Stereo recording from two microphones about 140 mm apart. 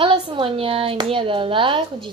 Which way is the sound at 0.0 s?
40° right (ahead or behind).